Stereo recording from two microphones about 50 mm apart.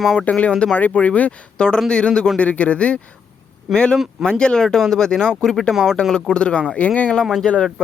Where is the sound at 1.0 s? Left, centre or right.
Left.